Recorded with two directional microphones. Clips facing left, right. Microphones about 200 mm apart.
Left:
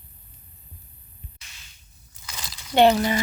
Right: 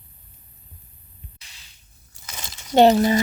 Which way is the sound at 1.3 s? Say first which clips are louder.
Even; 35° right (ahead or behind).